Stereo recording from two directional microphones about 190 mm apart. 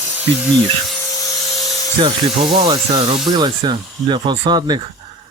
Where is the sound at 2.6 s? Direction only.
30° right (ahead or behind).